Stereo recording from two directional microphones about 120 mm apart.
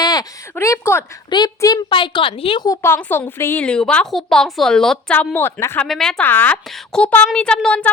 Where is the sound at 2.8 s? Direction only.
20° left (ahead or behind).